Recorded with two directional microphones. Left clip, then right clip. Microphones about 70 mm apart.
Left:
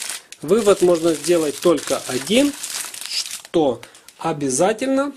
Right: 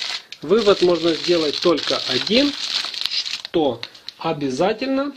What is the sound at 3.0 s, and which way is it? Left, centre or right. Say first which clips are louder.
Crumpling: right 6 dB; centre.